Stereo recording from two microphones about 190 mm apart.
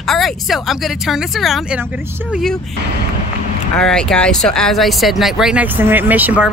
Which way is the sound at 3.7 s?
5° left (ahead or behind).